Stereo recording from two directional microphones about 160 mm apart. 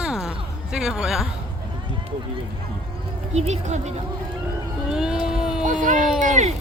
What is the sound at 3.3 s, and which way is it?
Speech, 45° right (ahead or behind).